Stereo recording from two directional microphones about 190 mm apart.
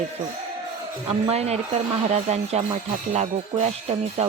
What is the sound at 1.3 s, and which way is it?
Speech, 35° right (ahead or behind).